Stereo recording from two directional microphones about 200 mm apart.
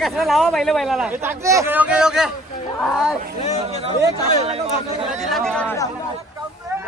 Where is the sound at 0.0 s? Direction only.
Centre (ahead or behind).